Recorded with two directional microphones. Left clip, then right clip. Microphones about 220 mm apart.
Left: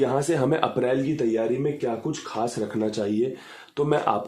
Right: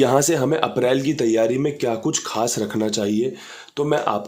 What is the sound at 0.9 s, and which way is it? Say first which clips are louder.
Speech: right 5 dB; 35° right (ahead or behind).